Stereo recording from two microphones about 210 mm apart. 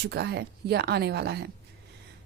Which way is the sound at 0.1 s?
50° right (ahead or behind).